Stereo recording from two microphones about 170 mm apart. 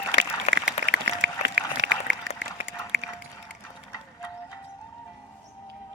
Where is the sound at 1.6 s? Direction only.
90° right.